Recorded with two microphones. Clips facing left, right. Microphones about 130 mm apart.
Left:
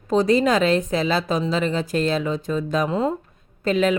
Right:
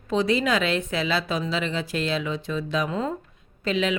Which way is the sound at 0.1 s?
40° left (ahead or behind).